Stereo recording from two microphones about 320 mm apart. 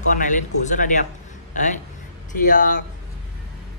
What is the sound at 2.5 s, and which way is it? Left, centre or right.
Speech, left.